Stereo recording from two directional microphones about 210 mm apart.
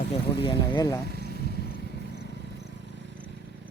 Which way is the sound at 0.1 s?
25° left (ahead or behind).